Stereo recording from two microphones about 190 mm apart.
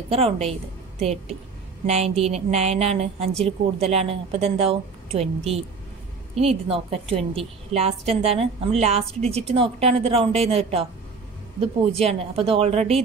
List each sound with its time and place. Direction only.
0.1 s a woman's voice: 30° right (ahead or behind)